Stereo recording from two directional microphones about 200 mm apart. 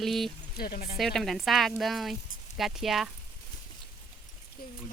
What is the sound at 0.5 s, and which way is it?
Speech, 50° left (ahead or behind).